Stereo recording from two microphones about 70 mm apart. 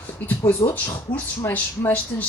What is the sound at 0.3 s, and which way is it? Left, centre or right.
Speech, left.